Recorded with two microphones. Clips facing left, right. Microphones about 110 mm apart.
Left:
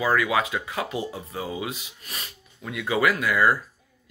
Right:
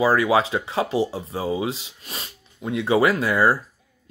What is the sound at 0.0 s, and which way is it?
Speech, 30° right (ahead or behind).